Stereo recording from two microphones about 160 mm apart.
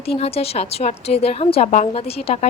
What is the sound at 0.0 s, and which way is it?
Speech, 40° left (ahead or behind).